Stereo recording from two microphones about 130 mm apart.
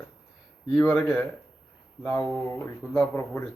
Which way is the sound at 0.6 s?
Centre (ahead or behind).